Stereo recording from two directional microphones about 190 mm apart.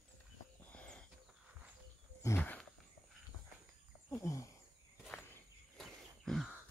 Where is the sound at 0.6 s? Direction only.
5° left (ahead or behind).